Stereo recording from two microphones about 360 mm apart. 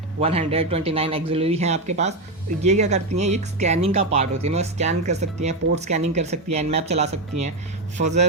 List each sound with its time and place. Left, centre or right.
0.2 s speech: centre